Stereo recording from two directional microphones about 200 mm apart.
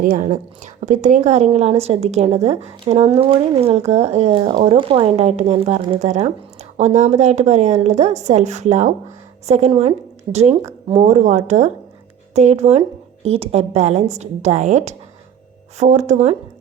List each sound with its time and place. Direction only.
0.0 s a woman's voice: 40° right (ahead or behind)